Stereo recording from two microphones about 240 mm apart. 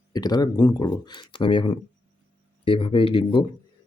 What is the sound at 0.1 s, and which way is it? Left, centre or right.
Speech, centre.